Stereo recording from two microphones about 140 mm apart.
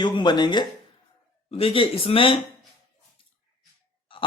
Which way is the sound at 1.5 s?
40° left (ahead or behind).